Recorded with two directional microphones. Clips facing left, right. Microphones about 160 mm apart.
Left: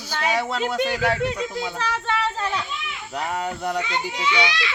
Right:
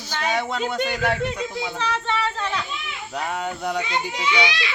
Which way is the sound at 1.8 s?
10° left (ahead or behind).